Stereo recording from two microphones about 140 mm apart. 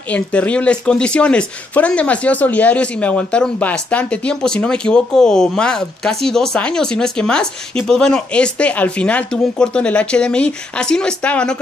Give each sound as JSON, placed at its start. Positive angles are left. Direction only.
{"t": 0.1, "sound": "speech", "side_deg": 10}